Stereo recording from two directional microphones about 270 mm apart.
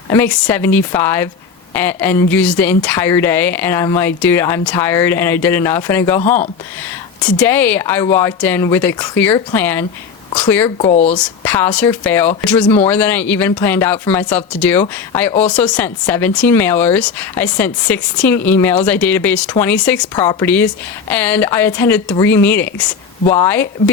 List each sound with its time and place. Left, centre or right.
0.1 s speech: centre
10.8 s speech: left
11.1 s speech: centre